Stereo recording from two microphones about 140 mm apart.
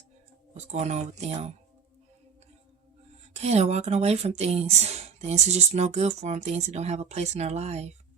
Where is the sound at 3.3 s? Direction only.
50° right (ahead or behind).